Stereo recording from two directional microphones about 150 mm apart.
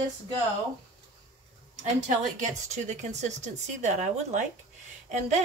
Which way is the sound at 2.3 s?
55° right (ahead or behind).